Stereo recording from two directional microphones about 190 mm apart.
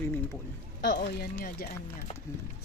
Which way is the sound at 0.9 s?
60° left (ahead or behind).